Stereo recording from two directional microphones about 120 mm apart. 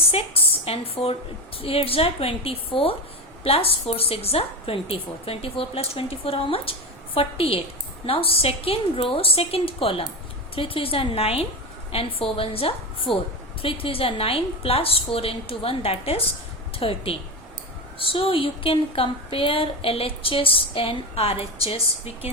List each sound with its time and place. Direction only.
0.1 s a woman's voice: 55° left (ahead or behind)